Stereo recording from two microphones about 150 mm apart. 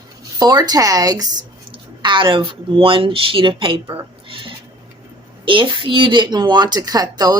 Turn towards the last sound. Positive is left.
turn(degrees=-25)  # may be behind; listen again after turning